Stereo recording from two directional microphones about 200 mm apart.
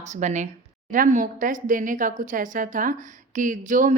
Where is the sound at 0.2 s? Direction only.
35° right (ahead or behind).